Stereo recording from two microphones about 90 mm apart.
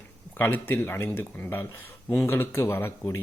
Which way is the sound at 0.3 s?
25° left (ahead or behind).